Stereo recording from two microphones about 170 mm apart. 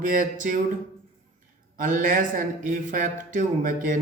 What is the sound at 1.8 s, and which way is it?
Speech, 50° right (ahead or behind).